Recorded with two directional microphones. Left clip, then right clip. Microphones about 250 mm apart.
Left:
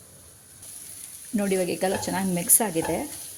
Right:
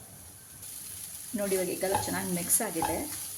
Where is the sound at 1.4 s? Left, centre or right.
Left.